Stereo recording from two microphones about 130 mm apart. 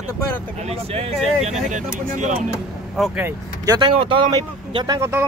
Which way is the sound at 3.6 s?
30° right (ahead or behind).